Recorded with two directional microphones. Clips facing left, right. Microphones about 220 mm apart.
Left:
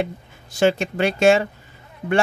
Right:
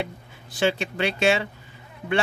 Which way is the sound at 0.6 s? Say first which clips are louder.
Left 5 dB; 45° left (ahead or behind).